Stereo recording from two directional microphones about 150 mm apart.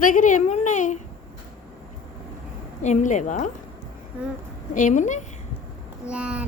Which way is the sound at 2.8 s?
50° left (ahead or behind).